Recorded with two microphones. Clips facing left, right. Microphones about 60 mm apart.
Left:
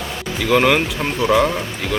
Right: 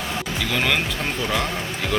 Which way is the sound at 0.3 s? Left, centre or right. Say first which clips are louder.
Left 9 dB; centre.